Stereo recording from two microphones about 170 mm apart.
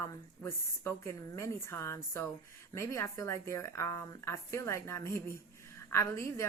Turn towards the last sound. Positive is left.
turn(degrees=15)  # may be behind; listen again after turning